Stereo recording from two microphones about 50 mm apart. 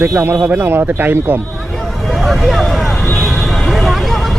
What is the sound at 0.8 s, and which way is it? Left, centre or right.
Speech, right.